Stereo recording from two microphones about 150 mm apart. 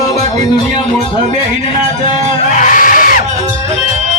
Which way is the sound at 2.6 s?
60° left (ahead or behind).